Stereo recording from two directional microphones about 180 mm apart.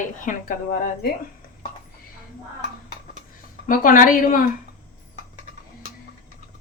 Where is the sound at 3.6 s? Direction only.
50° left (ahead or behind).